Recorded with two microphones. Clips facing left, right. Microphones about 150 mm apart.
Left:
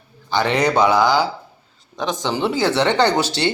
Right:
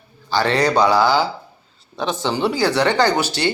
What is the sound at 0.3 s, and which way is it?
Speech, 20° left (ahead or behind).